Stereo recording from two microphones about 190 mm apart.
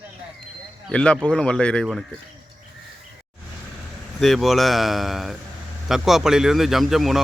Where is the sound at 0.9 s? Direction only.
5° left (ahead or behind).